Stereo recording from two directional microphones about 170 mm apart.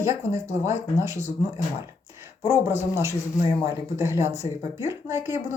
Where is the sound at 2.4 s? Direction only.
15° right (ahead or behind).